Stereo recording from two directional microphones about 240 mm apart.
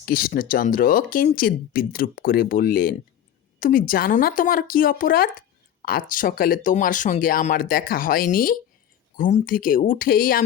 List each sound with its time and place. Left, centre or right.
0.0 s speech: left